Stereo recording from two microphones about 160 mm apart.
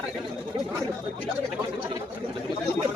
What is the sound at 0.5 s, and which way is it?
Speech, 30° right (ahead or behind).